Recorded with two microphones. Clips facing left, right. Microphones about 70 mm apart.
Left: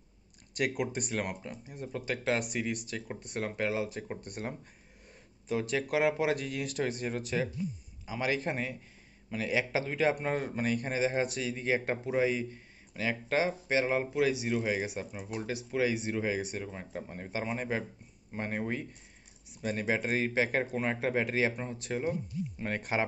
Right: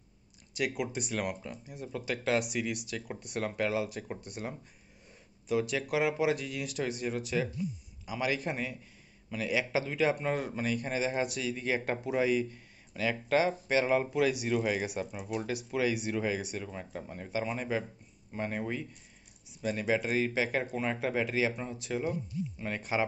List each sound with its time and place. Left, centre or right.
0.6 s speech: left
1.1 s a man's voice: left
4.2 s a man's voice: left
19.6 s a man's voice: left
22.8 s speech: left